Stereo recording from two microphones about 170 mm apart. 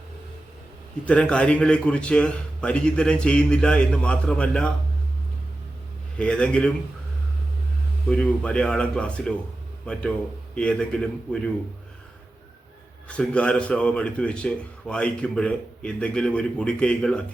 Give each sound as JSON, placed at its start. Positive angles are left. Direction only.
{"t": 1.0, "sound": "a man's voice", "side_deg": 5}
{"t": 6.1, "sound": "a man's voice", "side_deg": 5}
{"t": 8.0, "sound": "a man's voice", "side_deg": 5}
{"t": 13.1, "sound": "a man's voice", "side_deg": 5}